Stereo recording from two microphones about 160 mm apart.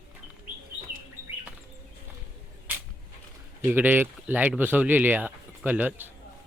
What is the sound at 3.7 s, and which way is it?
Speech, 10° right (ahead or behind).